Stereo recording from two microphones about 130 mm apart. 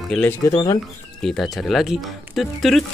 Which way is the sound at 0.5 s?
35° left (ahead or behind).